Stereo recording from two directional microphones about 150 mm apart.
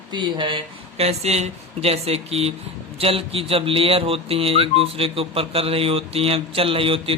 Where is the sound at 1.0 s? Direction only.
45° right (ahead or behind).